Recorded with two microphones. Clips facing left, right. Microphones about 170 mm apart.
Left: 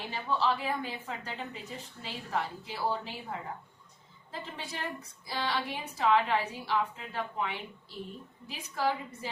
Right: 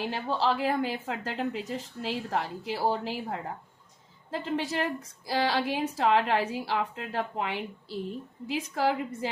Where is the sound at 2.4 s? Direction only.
70° right (ahead or behind).